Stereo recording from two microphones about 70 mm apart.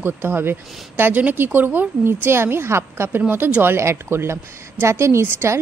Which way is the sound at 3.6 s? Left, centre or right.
Right.